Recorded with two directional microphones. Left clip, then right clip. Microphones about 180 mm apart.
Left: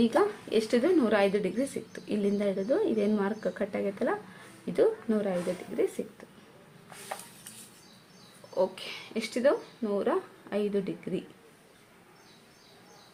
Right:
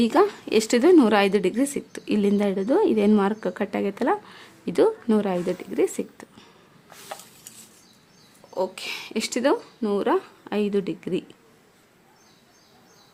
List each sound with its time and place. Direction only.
0.0 s a woman's voice: 50° right (ahead or behind)
8.5 s a woman's voice: 40° right (ahead or behind); by 11.2 s 55° right (ahead or behind)